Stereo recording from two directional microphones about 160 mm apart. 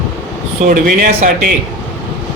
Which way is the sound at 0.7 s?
60° right (ahead or behind).